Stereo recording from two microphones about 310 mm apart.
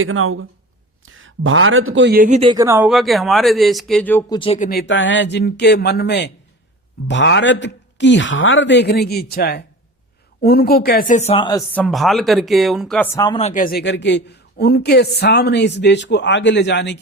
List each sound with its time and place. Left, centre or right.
0.0 s speech: right; by 13.1 s centre
13.1 s speech: centre; by 17.0 s left